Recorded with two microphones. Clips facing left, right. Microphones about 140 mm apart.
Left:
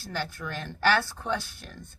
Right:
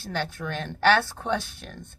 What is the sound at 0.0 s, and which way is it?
Speech, 25° right (ahead or behind).